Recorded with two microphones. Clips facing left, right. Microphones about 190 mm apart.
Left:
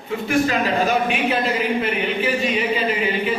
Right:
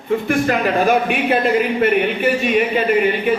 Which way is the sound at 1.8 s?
55° right (ahead or behind).